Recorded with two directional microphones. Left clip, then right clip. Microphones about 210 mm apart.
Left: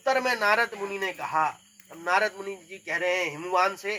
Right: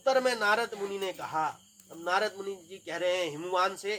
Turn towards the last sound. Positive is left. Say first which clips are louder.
# left 4 dB
turn(degrees=-10)  # may be behind; listen again after turning